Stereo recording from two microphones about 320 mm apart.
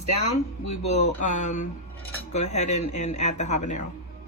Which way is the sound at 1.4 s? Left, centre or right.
Left.